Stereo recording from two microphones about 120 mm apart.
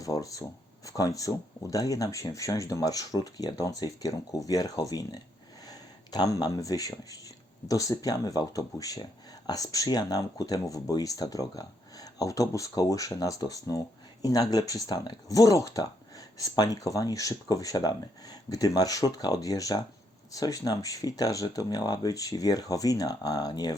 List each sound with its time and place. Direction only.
0.0 s speech: 30° left (ahead or behind)